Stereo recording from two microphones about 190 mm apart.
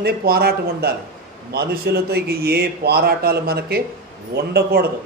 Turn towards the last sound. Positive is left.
turn(degrees=-60)  # may be behind; listen again after turning